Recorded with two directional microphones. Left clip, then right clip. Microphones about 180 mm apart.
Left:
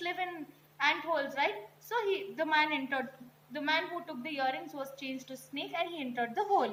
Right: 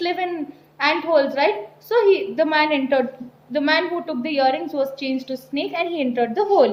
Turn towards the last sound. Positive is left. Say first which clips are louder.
# right 13 dB
turn(degrees=-45)  # may be behind; listen again after turning